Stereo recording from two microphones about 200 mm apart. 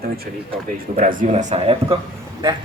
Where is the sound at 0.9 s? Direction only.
40° right (ahead or behind).